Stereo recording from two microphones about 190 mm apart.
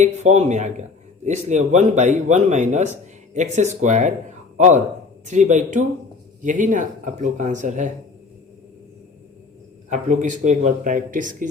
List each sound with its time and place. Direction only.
0.0 s speech: 40° right (ahead or behind)
9.9 s speech: 40° right (ahead or behind)